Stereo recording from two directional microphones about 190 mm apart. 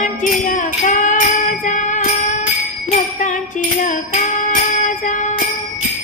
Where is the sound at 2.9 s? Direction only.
40° left (ahead or behind).